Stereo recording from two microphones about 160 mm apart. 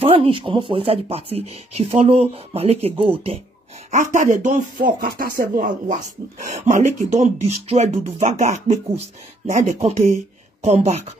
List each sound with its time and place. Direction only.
0.0 s speech: 35° right (ahead or behind)
3.9 s speech: 50° right (ahead or behind)
5.0 s speech: 65° right (ahead or behind)
6.5 s speech: 50° right (ahead or behind)